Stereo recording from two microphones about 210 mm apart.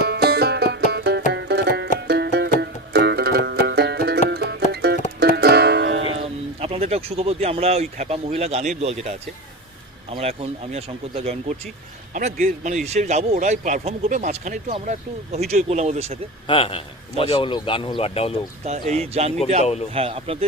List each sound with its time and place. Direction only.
0.1 s music: 50° right (ahead or behind)
6.1 s speech: 30° right (ahead or behind)
16.5 s a man's voice: 25° left (ahead or behind)
18.6 s speech: 30° right (ahead or behind)